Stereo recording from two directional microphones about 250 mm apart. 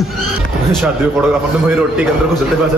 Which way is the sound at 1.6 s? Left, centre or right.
Centre.